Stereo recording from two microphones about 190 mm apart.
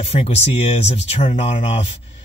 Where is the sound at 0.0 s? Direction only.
30° left (ahead or behind).